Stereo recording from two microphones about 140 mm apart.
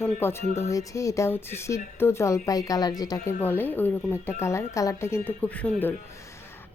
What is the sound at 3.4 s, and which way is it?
A woman's voice, 15° left (ahead or behind).